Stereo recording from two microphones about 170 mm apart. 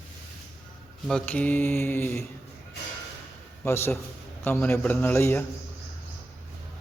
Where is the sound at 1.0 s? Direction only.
5° left (ahead or behind).